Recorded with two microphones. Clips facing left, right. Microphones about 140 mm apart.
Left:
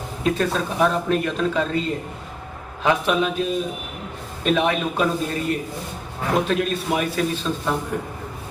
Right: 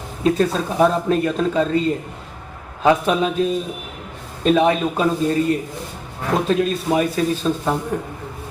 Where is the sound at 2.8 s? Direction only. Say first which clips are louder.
Right 3 dB; 35° right (ahead or behind).